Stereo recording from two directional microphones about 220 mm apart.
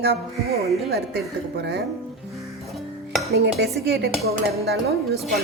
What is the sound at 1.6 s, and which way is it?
Speech, 50° right (ahead or behind).